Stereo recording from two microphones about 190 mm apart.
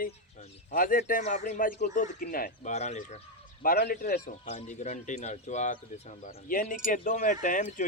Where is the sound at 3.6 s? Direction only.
50° left (ahead or behind).